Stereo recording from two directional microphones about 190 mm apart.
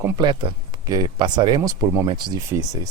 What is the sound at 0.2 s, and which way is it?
Speech, 25° right (ahead or behind).